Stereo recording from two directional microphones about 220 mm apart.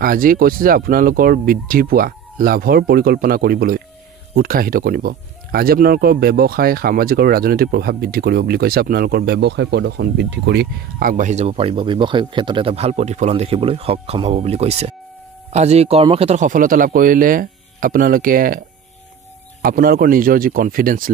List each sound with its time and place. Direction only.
0.0 s speech: 40° right (ahead or behind)
19.6 s speech: 40° right (ahead or behind)